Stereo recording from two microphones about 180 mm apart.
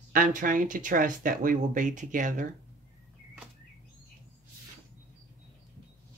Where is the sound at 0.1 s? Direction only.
50° right (ahead or behind).